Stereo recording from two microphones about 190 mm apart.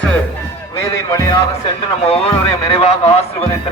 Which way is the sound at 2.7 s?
35° left (ahead or behind).